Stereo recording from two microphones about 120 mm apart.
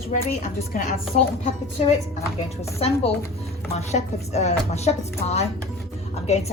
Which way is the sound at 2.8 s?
55° left (ahead or behind).